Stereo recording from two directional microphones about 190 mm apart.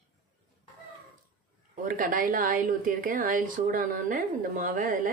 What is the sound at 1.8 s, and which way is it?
Speech, 45° right (ahead or behind).